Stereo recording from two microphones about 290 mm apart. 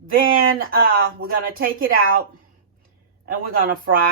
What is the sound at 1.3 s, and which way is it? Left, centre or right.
Speech, right.